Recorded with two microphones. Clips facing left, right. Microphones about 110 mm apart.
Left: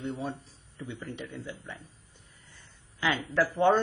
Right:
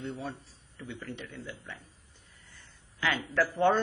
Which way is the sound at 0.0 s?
20° left (ahead or behind).